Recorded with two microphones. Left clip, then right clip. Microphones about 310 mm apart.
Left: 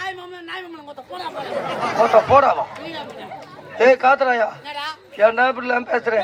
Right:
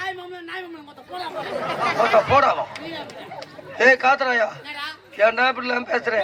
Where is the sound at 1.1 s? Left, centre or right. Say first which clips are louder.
Even; centre.